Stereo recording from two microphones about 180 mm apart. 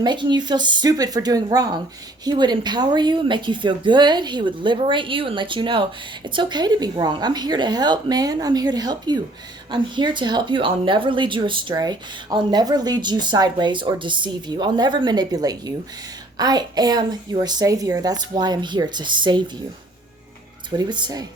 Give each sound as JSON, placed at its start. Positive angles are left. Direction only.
{"t": 0.0, "sound": "speech", "side_deg": -25}
{"t": 20.7, "sound": "speech", "side_deg": -25}